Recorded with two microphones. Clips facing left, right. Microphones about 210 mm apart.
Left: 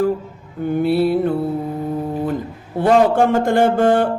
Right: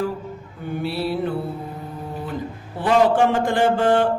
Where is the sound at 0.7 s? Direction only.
50° left (ahead or behind).